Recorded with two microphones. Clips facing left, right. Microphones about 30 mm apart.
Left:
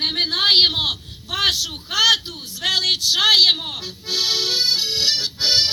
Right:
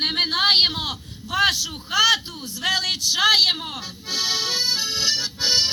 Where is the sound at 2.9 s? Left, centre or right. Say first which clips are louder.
Left 3 dB; left.